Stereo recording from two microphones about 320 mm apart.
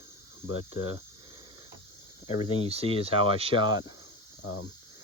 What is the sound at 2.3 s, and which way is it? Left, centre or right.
Speech, centre.